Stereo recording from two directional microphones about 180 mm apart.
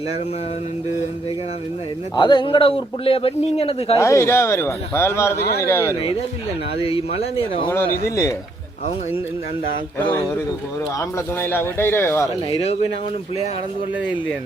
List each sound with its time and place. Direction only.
2.1 s speech: 25° left (ahead or behind)
3.9 s a man's voice: 15° left (ahead or behind)
6.8 s speech: 30° left (ahead or behind)
8.0 s a man's voice: 15° left (ahead or behind)
10.9 s a man's voice: 10° left (ahead or behind)